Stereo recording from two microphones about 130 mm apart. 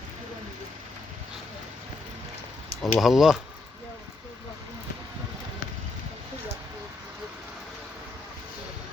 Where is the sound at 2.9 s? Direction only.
Centre (ahead or behind).